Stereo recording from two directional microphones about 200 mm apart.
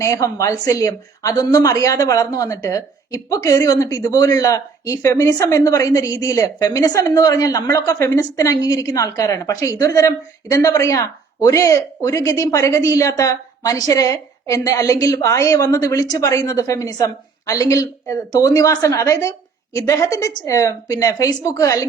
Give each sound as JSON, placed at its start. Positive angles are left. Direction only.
{"t": 0.0, "sound": "a woman's voice", "side_deg": 15}